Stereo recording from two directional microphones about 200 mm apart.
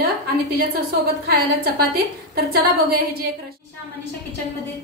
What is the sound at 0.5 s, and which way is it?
A woman's voice, 50° right (ahead or behind).